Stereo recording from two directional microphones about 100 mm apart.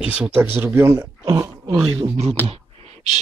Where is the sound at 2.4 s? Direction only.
70° right (ahead or behind).